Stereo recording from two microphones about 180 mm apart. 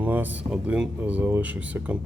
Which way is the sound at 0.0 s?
10° right (ahead or behind).